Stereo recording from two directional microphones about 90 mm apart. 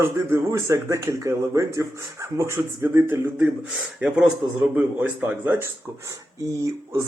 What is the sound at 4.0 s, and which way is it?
Speech, 15° right (ahead or behind).